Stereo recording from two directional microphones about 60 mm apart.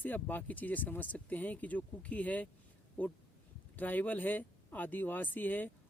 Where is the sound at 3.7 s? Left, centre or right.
Left.